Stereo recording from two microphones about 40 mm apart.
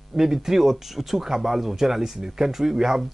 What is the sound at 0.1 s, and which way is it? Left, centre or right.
Speech, centre.